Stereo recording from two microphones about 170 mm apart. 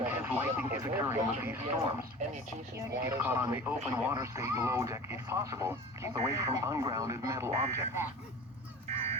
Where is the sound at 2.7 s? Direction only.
15° right (ahead or behind).